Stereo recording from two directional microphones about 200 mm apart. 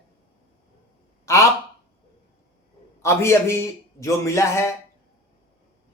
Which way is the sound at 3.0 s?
15° left (ahead or behind).